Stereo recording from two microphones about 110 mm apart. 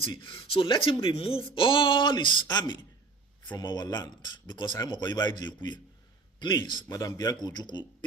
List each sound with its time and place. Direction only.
0.2 s speech: 55° left (ahead or behind)
6.8 s speech: 30° left (ahead or behind)